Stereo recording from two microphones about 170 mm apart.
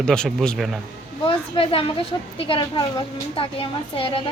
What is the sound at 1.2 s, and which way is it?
A woman's voice, 35° left (ahead or behind).